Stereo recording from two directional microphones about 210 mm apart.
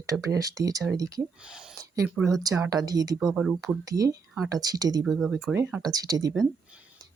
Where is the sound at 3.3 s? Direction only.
5° right (ahead or behind).